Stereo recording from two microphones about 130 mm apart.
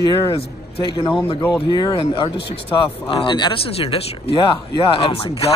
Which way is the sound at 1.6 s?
35° left (ahead or behind).